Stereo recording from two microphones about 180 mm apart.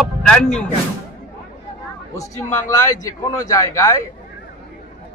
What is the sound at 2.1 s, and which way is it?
A man's voice, 20° left (ahead or behind).